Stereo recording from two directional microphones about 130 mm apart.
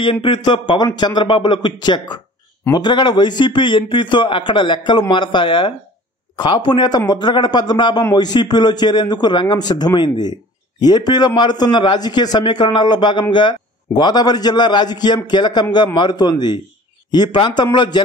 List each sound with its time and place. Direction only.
0.0 s a man's voice: 40° left (ahead or behind)